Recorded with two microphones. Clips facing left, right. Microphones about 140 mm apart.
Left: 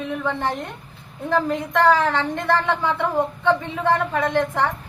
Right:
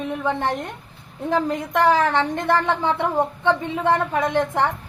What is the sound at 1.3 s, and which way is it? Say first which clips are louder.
A woman's voice: even; 15° right (ahead or behind).